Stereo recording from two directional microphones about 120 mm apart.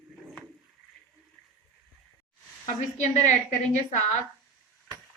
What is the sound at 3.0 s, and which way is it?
A woman's voice, 80° left.